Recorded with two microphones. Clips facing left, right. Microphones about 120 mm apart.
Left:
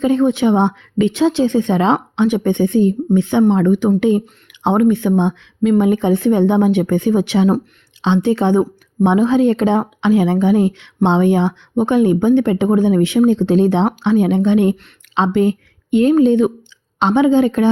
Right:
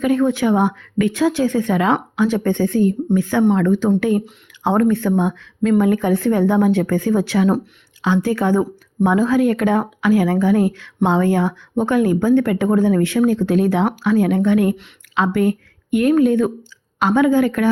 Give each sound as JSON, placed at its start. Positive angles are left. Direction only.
{"t": 0.0, "sound": "speech", "side_deg": 25}